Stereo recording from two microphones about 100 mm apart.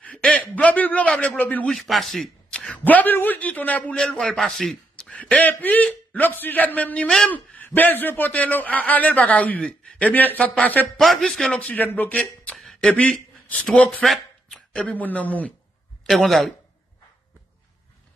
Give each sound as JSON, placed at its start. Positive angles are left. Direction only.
{"t": 0.0, "sound": "a sound", "side_deg": 15}
{"t": 1.7, "sound": "a man's voice", "side_deg": 0}
{"t": 11.0, "sound": "a man's voice", "side_deg": 5}
{"t": 12.5, "sound": "a sound", "side_deg": 0}
{"t": 12.9, "sound": "a man's voice", "side_deg": 15}
{"t": 16.1, "sound": "a man's voice", "side_deg": 0}